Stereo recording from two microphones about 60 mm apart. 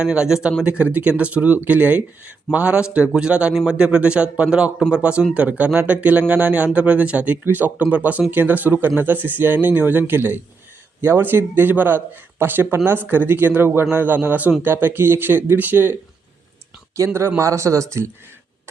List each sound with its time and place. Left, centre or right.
0.0 s a man's voice: centre; by 16.0 s right
17.1 s speech: right